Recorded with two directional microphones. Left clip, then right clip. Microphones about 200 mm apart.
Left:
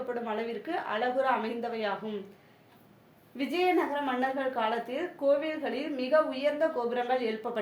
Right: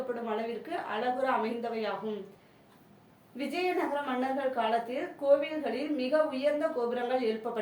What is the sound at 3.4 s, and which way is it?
Speech, 25° left (ahead or behind).